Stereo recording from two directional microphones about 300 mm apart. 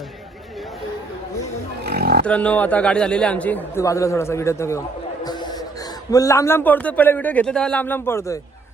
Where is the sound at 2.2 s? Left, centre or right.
Centre.